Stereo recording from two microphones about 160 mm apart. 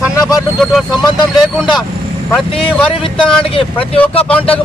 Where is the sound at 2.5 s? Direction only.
30° left (ahead or behind).